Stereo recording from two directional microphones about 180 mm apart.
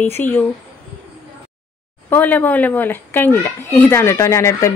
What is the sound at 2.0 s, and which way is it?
A woman's voice, 10° left (ahead or behind).